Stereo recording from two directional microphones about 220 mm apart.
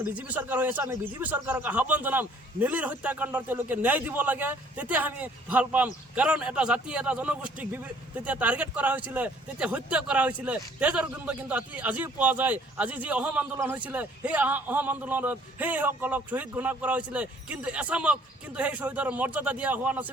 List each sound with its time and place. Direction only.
0.0 s speech: 10° right (ahead or behind)